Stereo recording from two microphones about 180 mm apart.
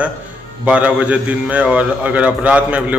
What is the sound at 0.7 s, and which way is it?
A man's voice, 5° right (ahead or behind).